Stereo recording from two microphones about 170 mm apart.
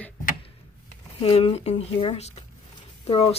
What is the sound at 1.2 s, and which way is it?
Speech, 35° left (ahead or behind).